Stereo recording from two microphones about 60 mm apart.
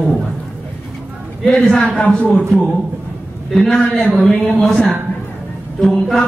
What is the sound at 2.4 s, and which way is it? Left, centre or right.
A woman's voice, centre.